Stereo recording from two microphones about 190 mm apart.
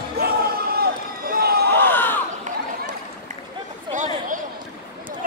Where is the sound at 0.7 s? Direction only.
50° right (ahead or behind).